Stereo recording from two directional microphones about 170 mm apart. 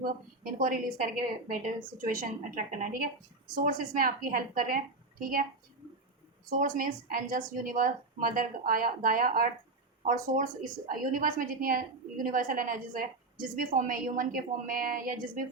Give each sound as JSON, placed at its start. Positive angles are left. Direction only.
{"t": 0.0, "sound": "a woman's voice", "side_deg": -55}
{"t": 6.5, "sound": "a woman's voice", "side_deg": -50}